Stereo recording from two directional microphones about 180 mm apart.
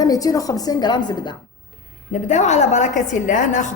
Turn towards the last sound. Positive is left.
turn(degrees=45)  # may be behind; listen again after turning